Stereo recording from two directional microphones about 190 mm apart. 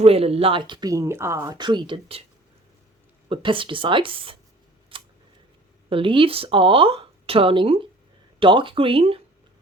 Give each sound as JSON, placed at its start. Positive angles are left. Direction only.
{"t": 0.0, "sound": "speech", "side_deg": -30}
{"t": 3.2, "sound": "speech", "side_deg": -25}
{"t": 4.9, "sound": "scissors", "side_deg": -25}
{"t": 5.9, "sound": "speech", "side_deg": -25}